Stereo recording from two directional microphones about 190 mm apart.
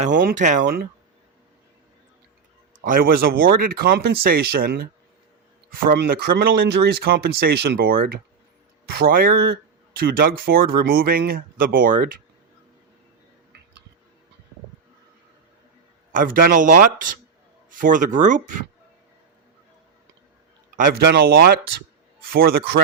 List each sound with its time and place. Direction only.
0.0 s speech: 45° right (ahead or behind)
2.8 s speech: 50° right (ahead or behind)
16.1 s speech: 50° right (ahead or behind)
20.7 s speech: 50° right (ahead or behind)